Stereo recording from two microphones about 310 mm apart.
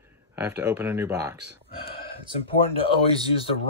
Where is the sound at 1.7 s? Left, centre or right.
Centre.